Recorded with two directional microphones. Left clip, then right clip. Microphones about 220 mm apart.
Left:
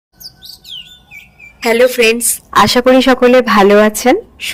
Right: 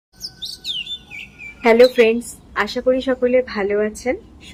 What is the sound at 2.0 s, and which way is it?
Speech, 50° left (ahead or behind).